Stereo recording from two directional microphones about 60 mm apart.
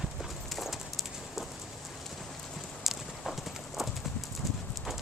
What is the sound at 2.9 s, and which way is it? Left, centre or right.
Clip-clop, centre.